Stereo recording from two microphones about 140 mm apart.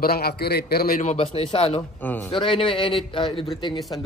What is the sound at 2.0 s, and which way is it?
Speech, 15° left (ahead or behind).